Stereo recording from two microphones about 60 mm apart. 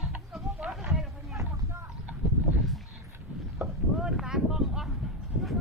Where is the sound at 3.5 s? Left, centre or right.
Centre.